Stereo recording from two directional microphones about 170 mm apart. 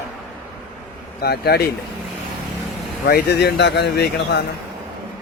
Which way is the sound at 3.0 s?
70° left (ahead or behind).